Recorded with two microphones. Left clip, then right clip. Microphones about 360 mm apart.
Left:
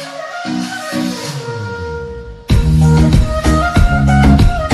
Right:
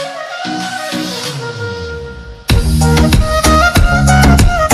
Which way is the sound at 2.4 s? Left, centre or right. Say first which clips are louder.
Right 3 dB; right.